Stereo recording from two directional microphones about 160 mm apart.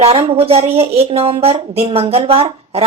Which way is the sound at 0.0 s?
35° right (ahead or behind).